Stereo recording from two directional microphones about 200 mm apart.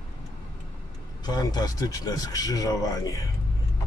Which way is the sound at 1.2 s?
20° left (ahead or behind).